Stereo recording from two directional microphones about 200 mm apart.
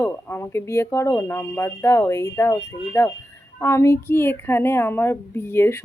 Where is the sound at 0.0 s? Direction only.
10° left (ahead or behind).